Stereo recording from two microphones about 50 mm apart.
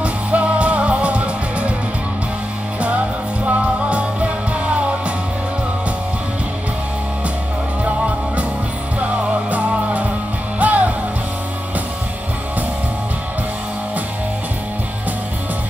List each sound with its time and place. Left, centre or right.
0.0 s music: right
3.4 s music: right
10.6 s music: right